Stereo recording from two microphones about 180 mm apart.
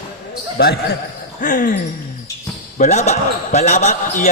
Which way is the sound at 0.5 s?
60° left (ahead or behind).